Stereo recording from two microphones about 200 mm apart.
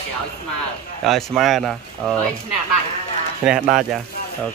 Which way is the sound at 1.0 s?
Centre (ahead or behind).